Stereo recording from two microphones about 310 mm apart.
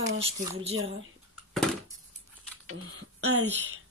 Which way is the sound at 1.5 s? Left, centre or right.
Centre.